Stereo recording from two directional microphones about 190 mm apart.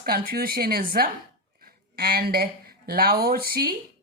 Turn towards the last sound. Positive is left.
turn(degrees=-50)  # may be behind; listen again after turning